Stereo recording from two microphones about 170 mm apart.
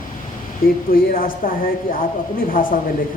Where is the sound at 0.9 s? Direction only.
55° left (ahead or behind).